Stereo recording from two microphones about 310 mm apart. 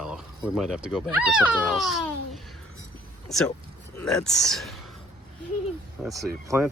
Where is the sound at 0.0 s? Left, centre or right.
Centre.